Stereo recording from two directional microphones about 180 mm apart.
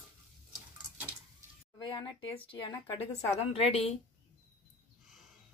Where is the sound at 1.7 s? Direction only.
25° left (ahead or behind).